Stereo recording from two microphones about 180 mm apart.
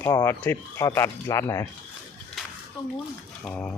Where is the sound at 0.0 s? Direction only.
15° left (ahead or behind).